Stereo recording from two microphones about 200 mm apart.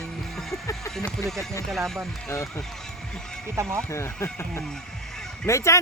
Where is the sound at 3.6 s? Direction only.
15° right (ahead or behind).